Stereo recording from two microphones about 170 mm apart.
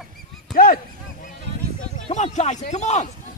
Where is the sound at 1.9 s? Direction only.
40° left (ahead or behind).